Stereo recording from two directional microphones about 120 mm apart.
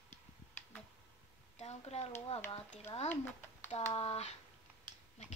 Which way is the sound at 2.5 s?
60° left (ahead or behind).